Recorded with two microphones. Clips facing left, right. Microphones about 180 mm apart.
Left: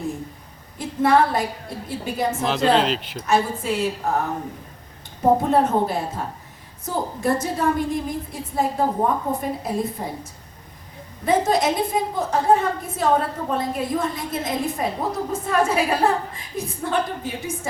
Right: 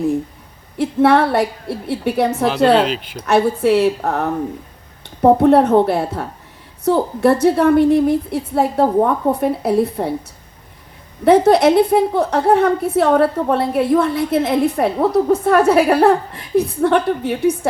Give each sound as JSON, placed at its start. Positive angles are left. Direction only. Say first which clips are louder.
{"t": 0.8, "sound": "a woman's voice", "louder": "right 5 dB", "side_deg": -70}
{"t": 2.7, "sound": "speech", "louder": "right 4 dB", "side_deg": 0}
{"t": 3.2, "sound": "a woman's voice", "louder": "right 7 dB", "side_deg": -65}
{"t": 11.3, "sound": "a woman's voice", "louder": "right 9 dB", "side_deg": -70}